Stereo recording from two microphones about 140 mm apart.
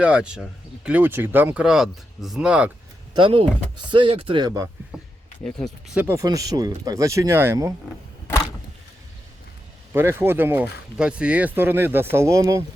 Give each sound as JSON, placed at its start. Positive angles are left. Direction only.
{"t": 0.0, "sound": "speech", "side_deg": -5}
{"t": 3.2, "sound": "speech", "side_deg": -35}
{"t": 5.4, "sound": "speech", "side_deg": 5}
{"t": 5.9, "sound": "speech", "side_deg": -10}
{"t": 6.1, "sound": "speech", "side_deg": -25}
{"t": 9.9, "sound": "speech", "side_deg": -15}